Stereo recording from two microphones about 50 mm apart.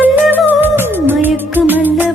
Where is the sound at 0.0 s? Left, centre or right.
Right.